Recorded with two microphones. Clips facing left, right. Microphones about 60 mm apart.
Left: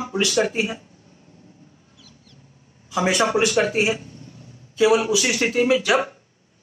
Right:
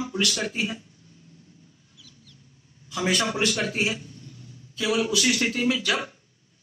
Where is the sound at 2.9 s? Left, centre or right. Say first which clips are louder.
Left 6 dB; centre.